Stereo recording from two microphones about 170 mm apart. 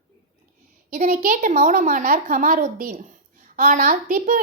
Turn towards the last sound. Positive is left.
turn(degrees=-50)  # may be behind; listen again after turning